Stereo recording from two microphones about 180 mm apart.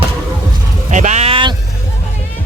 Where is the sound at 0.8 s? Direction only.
45° right (ahead or behind).